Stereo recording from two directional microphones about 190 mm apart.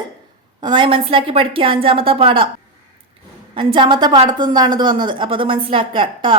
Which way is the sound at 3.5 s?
25° right (ahead or behind).